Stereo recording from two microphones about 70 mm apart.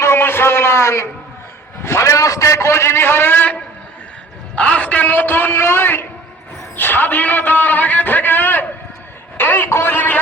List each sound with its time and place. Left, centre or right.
0.0 s a man's voice: left